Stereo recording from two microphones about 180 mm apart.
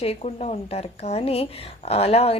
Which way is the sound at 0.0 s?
35° left (ahead or behind).